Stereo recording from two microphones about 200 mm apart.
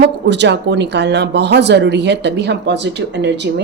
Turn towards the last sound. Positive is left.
turn(degrees=-60)  # may be behind; listen again after turning